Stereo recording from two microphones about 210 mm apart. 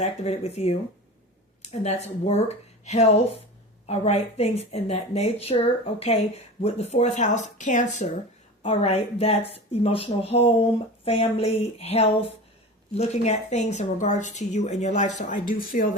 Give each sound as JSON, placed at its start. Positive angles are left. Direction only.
{"t": 0.0, "sound": "a woman's voice", "side_deg": 30}